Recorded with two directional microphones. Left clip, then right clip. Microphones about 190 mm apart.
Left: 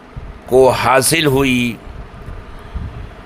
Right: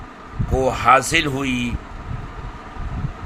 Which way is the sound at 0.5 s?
55° left (ahead or behind).